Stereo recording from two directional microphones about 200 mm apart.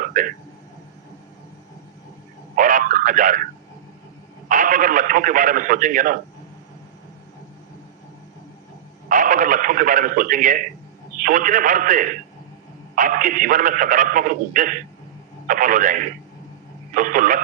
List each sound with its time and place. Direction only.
0.1 s a man's voice: 40° right (ahead or behind)
2.6 s radio: 40° right (ahead or behind)
4.4 s speech: 40° right (ahead or behind)
9.0 s a man's voice: 40° right (ahead or behind)